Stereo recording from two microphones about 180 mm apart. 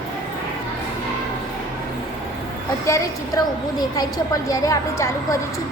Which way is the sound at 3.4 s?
20° left (ahead or behind).